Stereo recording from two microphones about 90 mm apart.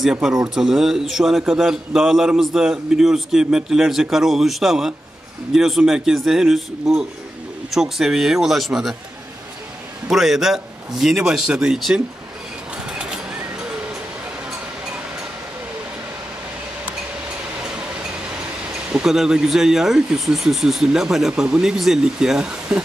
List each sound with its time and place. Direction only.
0.1 s speech: 5° right (ahead or behind)
10.0 s speech: 5° right (ahead or behind)
12.7 s sewing machine: 10° right (ahead or behind)
18.9 s speech: 10° right (ahead or behind)